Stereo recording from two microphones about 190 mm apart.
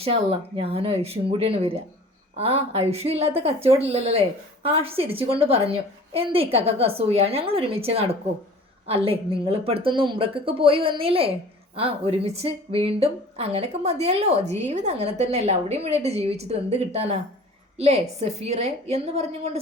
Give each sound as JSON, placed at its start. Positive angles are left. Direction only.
{"t": 0.0, "sound": "speech", "side_deg": -30}